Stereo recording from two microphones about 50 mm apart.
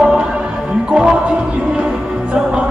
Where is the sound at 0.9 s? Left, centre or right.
Centre.